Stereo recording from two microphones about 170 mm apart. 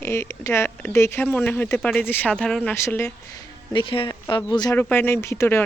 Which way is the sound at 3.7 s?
30° left (ahead or behind).